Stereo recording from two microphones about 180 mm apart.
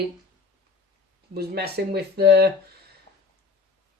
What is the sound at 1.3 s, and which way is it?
Speech, 65° right (ahead or behind).